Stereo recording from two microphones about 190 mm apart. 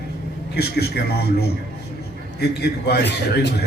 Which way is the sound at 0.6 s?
55° left (ahead or behind).